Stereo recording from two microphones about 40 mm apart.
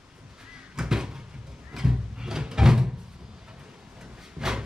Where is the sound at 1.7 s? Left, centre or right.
Centre.